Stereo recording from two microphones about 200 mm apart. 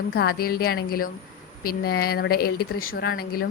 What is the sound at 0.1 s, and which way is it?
Speech, 50° left (ahead or behind).